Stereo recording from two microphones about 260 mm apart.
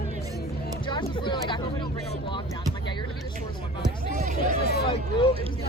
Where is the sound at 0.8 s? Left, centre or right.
Centre.